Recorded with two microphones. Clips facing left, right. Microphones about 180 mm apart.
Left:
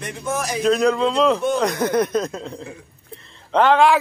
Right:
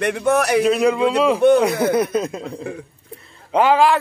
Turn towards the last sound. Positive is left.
turn(degrees=-5)  # may be behind; listen again after turning